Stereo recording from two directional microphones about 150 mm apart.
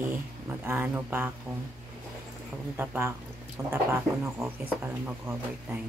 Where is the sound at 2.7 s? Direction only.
15° right (ahead or behind).